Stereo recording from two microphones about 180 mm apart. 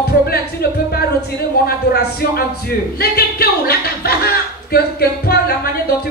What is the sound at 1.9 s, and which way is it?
A man's voice, 60° left (ahead or behind).